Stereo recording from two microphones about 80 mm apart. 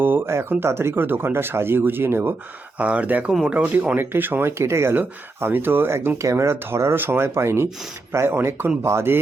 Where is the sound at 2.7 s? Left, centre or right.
Centre.